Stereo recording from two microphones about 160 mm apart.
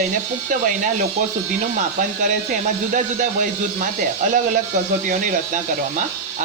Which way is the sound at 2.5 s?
50° right (ahead or behind).